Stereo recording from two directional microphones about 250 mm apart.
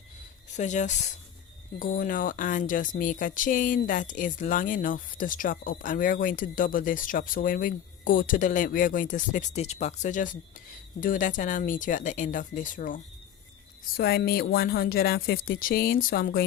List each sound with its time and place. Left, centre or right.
0.5 s speech: left